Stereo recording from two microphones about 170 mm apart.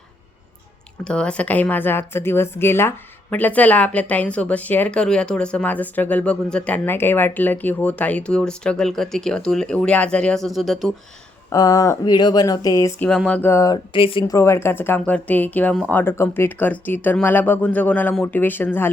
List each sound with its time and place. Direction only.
1.0 s a woman's voice: 5° left (ahead or behind)
11.5 s speech: 20° left (ahead or behind)
13.0 s a woman's voice: 5° left (ahead or behind)
13.9 s speech: 30° left (ahead or behind)
14.3 s a woman's voice: 15° left (ahead or behind)